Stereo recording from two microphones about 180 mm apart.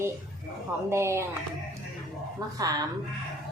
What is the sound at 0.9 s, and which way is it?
Speech, 15° right (ahead or behind).